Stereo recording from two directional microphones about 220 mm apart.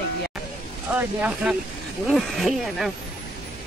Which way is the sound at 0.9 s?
5° right (ahead or behind).